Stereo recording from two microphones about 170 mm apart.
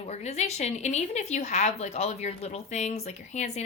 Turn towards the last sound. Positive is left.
turn(degrees=45)  # may be behind; listen again after turning